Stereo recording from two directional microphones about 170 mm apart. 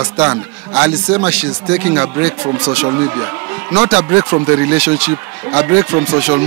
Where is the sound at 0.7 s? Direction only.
10° right (ahead or behind).